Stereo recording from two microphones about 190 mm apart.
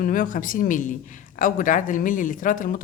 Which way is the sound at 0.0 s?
45° left (ahead or behind).